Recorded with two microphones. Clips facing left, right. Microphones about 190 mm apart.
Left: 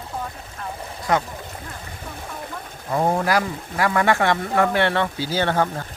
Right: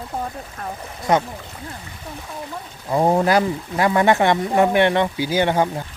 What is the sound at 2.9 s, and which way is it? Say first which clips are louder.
Speech: right 4 dB; 20° right (ahead or behind).